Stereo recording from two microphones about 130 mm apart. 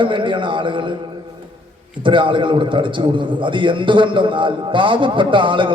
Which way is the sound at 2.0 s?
40° right (ahead or behind).